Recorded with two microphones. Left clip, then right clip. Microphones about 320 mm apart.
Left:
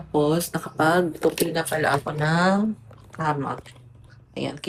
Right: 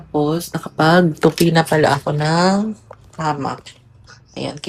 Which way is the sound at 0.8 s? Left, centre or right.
Right.